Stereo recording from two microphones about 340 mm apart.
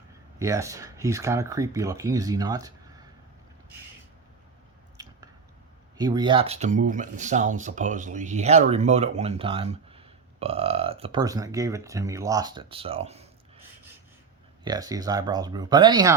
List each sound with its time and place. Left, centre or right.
0.3 s speech: centre
5.0 s biting: centre
6.0 s speech: centre
14.6 s speech: centre